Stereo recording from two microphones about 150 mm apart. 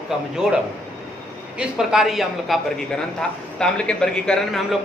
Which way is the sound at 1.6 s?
5° right (ahead or behind).